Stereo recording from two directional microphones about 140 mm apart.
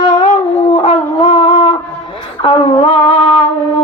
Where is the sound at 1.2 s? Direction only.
35° left (ahead or behind).